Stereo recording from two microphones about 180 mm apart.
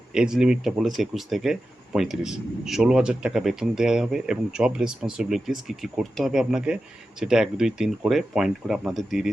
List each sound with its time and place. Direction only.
0.1 s speech: 5° right (ahead or behind)